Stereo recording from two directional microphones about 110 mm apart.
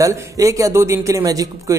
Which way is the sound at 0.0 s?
30° right (ahead or behind).